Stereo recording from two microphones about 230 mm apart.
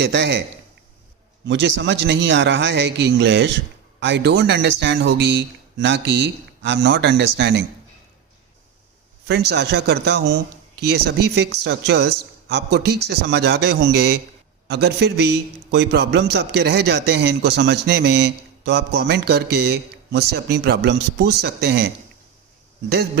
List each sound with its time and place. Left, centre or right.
0.0 s a man's voice: right
1.5 s a man's voice: right
9.2 s a man's voice: right